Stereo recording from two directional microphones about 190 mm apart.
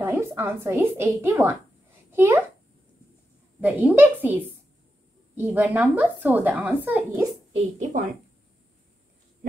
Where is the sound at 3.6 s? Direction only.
10° right (ahead or behind).